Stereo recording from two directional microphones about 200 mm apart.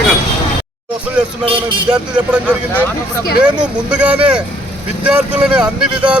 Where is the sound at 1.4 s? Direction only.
25° right (ahead or behind).